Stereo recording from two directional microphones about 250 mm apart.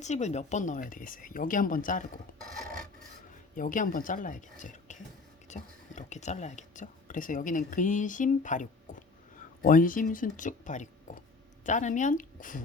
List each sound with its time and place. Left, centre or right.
0.0 s speech: left
3.5 s speech: left